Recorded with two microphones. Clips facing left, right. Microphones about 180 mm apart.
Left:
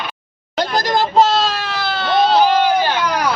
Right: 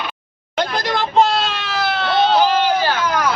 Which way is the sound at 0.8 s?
40° left (ahead or behind).